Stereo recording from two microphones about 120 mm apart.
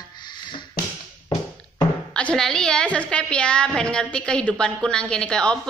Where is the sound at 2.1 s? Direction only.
5° left (ahead or behind).